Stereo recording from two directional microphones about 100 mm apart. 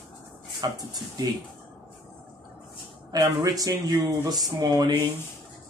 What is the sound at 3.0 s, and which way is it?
A woman's voice, 35° right (ahead or behind).